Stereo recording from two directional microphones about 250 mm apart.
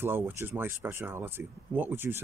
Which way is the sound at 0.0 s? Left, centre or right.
Centre.